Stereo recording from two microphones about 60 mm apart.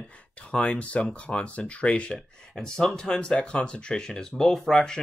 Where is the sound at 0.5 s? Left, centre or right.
Centre.